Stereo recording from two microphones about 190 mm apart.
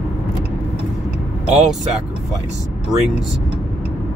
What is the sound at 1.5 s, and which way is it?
Speech, 5° right (ahead or behind).